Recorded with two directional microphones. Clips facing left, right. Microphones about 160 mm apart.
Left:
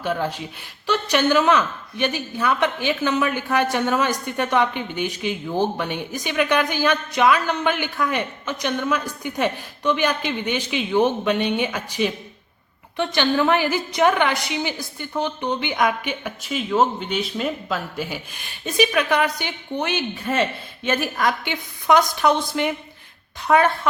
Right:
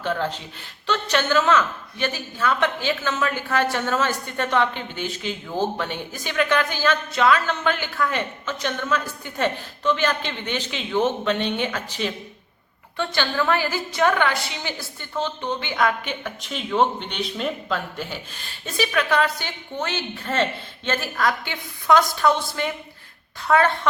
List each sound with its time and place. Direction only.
0.0 s a woman's voice: 10° left (ahead or behind)